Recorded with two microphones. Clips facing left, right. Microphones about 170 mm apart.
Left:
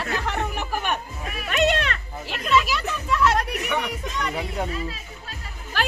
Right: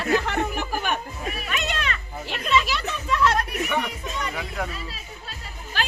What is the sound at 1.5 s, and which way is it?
Speech, 65° left (ahead or behind).